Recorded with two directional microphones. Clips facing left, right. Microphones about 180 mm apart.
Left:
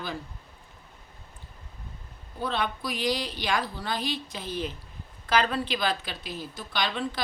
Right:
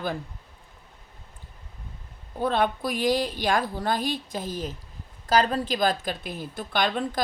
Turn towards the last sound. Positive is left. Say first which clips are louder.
# right 4 dB
turn(degrees=-50)  # may be behind; listen again after turning